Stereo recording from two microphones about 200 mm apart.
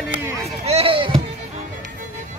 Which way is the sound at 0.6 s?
30° right (ahead or behind).